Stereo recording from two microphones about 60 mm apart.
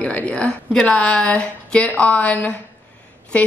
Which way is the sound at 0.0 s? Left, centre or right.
Left.